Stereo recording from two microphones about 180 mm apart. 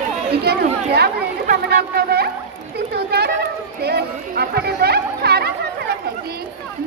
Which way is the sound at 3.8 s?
65° right (ahead or behind).